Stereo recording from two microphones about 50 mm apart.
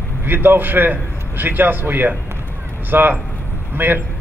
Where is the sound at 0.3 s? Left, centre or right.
Right.